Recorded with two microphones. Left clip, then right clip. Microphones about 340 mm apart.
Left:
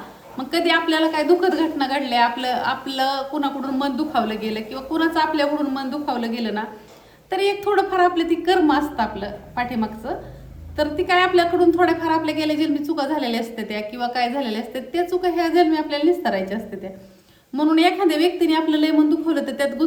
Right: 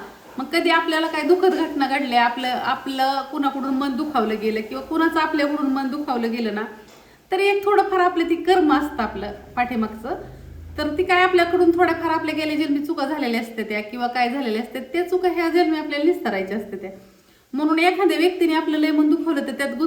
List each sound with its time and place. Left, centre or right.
0.3 s a woman's voice: centre